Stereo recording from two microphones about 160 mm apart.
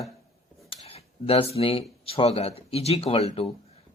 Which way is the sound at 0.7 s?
40° left (ahead or behind).